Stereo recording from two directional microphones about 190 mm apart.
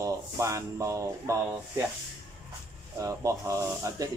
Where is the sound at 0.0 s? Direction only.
15° right (ahead or behind).